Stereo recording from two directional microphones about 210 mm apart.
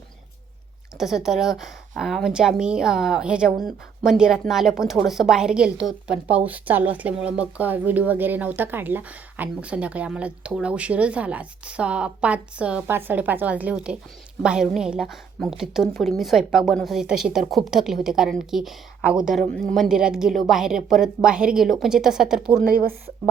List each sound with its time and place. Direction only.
0.9 s a woman's voice: centre (ahead or behind)
22.6 s speech: 45° right (ahead or behind)